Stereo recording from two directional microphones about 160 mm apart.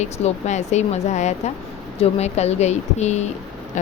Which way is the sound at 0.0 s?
45° left (ahead or behind).